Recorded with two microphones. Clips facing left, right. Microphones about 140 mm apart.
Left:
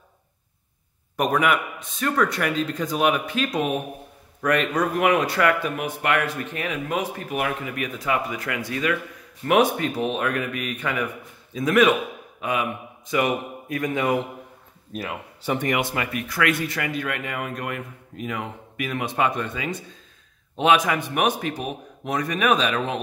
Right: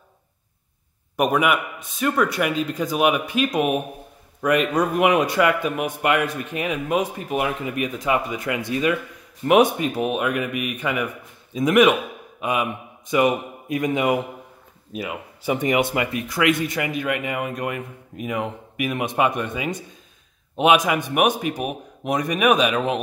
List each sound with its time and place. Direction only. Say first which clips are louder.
1.1 s a man's voice: right 2 dB; 10° right (ahead or behind)
14.9 s speech: right 2 dB; 5° right (ahead or behind)